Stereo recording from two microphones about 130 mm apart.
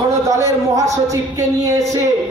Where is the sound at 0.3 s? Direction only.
25° right (ahead or behind).